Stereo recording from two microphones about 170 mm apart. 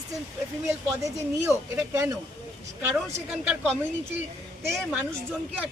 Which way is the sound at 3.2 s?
5° right (ahead or behind).